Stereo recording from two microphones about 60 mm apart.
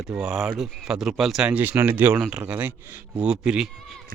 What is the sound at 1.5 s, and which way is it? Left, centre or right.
Speech, right.